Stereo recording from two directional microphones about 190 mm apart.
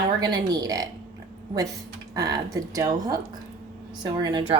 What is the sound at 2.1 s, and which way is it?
A woman's voice, 20° right (ahead or behind).